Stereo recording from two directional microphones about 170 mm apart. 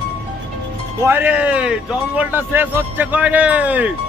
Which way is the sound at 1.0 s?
10° right (ahead or behind).